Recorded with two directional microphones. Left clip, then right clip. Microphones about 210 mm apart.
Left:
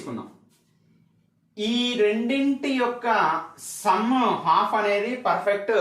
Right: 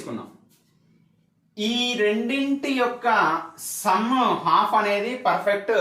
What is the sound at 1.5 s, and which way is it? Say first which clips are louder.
Speech: even; 15° left (ahead or behind).